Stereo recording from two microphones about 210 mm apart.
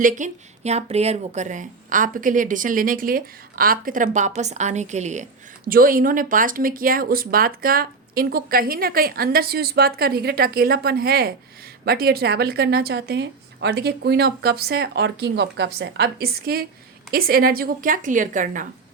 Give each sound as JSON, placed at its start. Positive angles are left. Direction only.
{"t": 0.0, "sound": "speech", "side_deg": -35}